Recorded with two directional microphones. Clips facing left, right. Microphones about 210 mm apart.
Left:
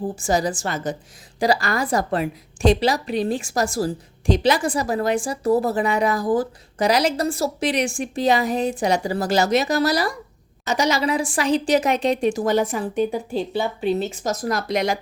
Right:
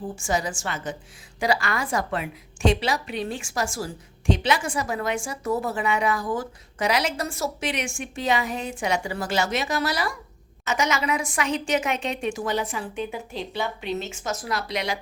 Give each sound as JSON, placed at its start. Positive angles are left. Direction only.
{"t": 0.0, "sound": "a woman's voice", "side_deg": 35}